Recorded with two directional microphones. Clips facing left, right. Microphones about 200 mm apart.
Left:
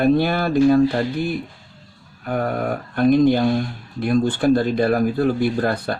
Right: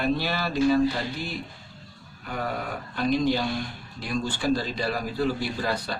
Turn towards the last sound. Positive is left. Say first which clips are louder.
# left 8 dB
turn(degrees=55)  # may be behind; listen again after turning